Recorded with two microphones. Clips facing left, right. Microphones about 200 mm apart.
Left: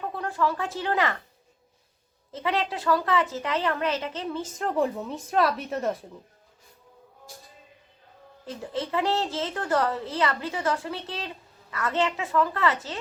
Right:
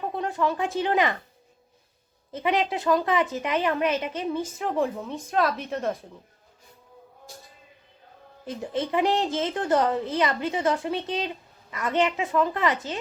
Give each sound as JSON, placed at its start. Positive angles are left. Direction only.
{"t": 0.0, "sound": "speech", "side_deg": -20}
{"t": 2.3, "sound": "speech", "side_deg": -15}
{"t": 4.6, "sound": "speech", "side_deg": 0}
{"t": 8.4, "sound": "a child's voice", "side_deg": -20}